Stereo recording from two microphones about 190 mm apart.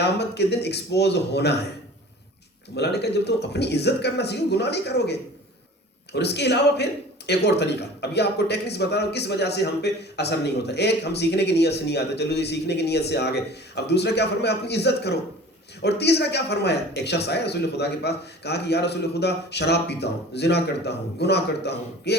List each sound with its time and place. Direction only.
0.0 s a man's voice: 60° left (ahead or behind)
2.7 s a man's voice: 60° left (ahead or behind)
6.1 s a man's voice: 60° left (ahead or behind)